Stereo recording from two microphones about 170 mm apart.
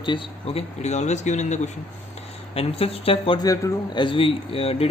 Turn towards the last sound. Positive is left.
turn(degrees=35)  # may be behind; listen again after turning